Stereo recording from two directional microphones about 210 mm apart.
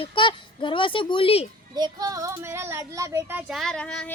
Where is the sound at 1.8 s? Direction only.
15° right (ahead or behind).